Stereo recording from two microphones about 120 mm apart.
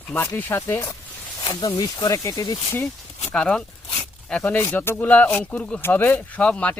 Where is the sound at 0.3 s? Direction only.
15° left (ahead or behind).